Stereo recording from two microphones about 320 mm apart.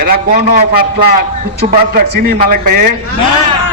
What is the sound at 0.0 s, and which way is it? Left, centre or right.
A man's voice, right.